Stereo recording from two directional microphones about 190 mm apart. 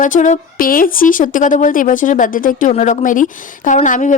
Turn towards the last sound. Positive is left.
turn(degrees=40)  # may be behind; listen again after turning